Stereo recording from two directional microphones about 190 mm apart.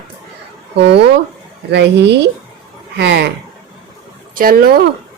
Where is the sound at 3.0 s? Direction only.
65° right (ahead or behind).